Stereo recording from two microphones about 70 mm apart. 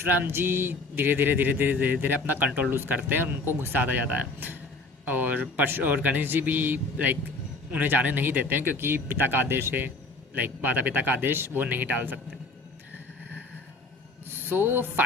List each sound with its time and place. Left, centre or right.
0.0 s speech: right
14.4 s speech: right